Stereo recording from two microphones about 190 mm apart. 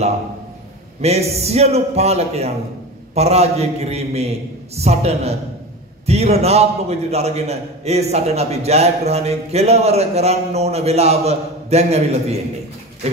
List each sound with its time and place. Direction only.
1.0 s a man's voice: 35° right (ahead or behind)